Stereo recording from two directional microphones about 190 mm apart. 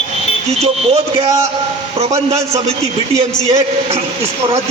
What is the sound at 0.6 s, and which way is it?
Speech, 30° right (ahead or behind).